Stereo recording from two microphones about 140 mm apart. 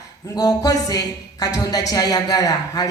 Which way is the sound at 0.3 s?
25° left (ahead or behind).